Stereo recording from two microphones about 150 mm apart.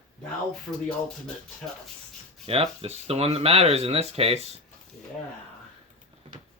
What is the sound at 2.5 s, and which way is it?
Speech, 45° right (ahead or behind).